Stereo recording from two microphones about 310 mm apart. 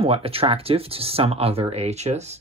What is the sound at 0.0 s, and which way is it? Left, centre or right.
Speech, centre.